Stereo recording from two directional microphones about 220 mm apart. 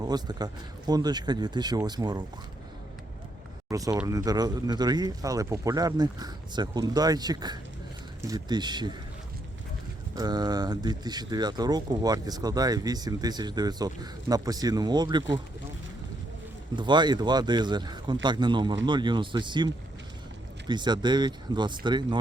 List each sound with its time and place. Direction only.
0.0 s speech: 20° right (ahead or behind)
3.7 s speech: 15° right (ahead or behind)
10.2 s speech: 20° right (ahead or behind)
16.7 s speech: 20° right (ahead or behind)